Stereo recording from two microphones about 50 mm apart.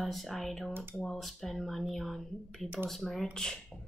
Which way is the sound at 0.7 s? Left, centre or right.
Right.